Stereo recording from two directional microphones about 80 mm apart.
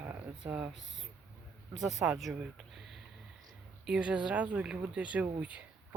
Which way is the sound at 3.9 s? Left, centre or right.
Centre.